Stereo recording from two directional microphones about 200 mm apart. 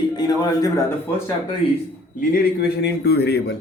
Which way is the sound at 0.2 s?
20° left (ahead or behind).